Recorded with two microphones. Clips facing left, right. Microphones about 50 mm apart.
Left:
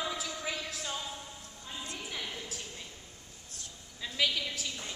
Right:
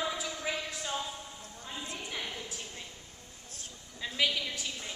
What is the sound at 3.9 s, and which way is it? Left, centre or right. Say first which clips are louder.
Speech: right 1 dB; centre.